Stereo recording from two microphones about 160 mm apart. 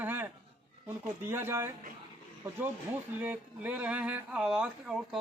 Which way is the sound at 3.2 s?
10° right (ahead or behind).